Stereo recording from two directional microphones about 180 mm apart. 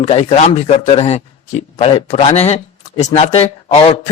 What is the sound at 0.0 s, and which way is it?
A man's voice, 40° left (ahead or behind).